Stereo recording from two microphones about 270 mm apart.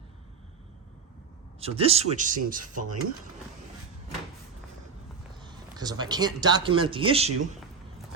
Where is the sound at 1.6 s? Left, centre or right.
Right.